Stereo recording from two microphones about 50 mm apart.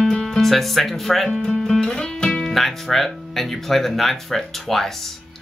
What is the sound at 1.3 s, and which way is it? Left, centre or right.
Speech, centre.